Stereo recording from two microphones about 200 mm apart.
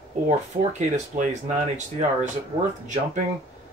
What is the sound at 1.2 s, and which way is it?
Speech, 35° right (ahead or behind).